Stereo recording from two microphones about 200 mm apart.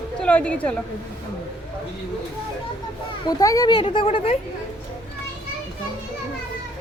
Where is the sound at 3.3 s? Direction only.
20° left (ahead or behind).